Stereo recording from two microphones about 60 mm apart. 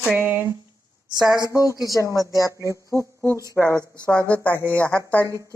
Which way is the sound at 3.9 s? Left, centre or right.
Left.